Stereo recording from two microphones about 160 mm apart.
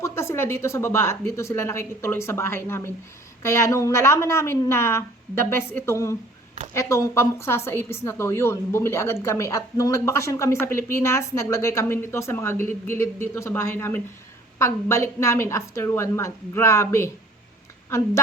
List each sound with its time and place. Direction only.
0.0 s speech: 15° left (ahead or behind)